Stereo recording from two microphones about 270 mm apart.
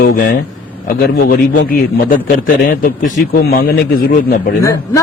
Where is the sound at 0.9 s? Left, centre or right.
Left.